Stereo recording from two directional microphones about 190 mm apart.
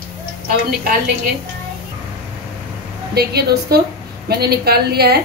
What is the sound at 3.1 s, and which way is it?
A woman's voice, 55° right (ahead or behind).